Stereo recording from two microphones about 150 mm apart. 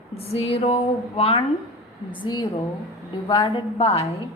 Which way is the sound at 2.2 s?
30° left (ahead or behind).